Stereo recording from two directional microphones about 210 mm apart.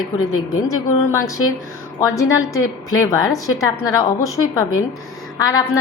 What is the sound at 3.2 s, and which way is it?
A woman's voice, 15° left (ahead or behind).